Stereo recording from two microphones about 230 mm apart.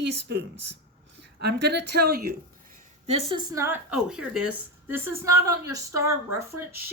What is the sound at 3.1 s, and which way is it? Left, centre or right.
Speech, right.